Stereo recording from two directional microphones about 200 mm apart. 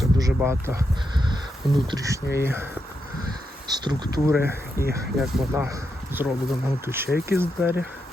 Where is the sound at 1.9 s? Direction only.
15° right (ahead or behind).